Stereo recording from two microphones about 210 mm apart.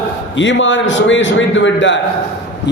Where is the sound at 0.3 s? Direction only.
60° left (ahead or behind).